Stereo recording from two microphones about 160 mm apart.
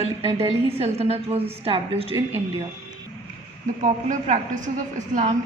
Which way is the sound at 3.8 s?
50° right (ahead or behind).